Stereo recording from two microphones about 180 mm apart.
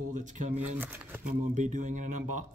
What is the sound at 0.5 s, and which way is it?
Speech, 10° right (ahead or behind).